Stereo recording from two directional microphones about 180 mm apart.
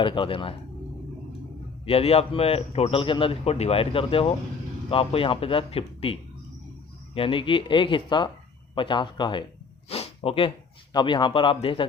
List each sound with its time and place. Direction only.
0.0 s speech: 30° left (ahead or behind)
1.8 s a man's voice: 35° left (ahead or behind)
9.9 s snort: 30° left (ahead or behind)
10.9 s speech: 25° left (ahead or behind)